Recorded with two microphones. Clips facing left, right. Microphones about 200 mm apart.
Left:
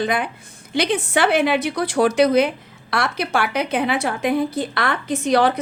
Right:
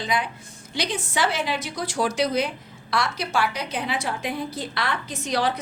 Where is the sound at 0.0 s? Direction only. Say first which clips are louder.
Left 5 dB; 55° left (ahead or behind).